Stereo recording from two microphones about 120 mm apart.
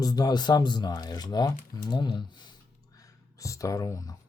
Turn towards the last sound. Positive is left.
turn(degrees=30)  # may be behind; listen again after turning